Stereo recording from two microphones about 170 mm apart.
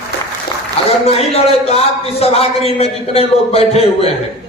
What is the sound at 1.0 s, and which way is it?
A man's voice, 35° left (ahead or behind).